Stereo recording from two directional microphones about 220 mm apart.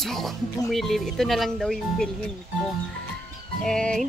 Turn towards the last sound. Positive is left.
turn(degrees=5)  # may be behind; listen again after turning